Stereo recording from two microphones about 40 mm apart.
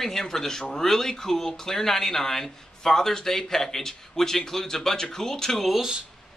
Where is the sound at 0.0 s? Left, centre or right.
Centre.